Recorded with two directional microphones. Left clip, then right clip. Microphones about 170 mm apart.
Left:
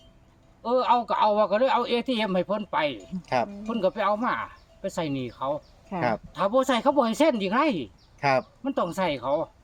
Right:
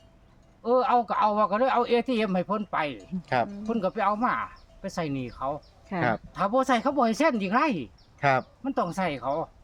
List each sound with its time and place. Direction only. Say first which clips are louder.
0.7 s speech: even; 5° right (ahead or behind)
3.2 s speech: even; 40° right (ahead or behind)
3.7 s speech: left 3 dB; 5° right (ahead or behind)
5.9 s speech: even; 40° right (ahead or behind)
6.3 s speech: left 1 dB; 5° right (ahead or behind)
8.2 s speech: even; 40° right (ahead or behind)
8.6 s speech: left 2 dB; 5° right (ahead or behind)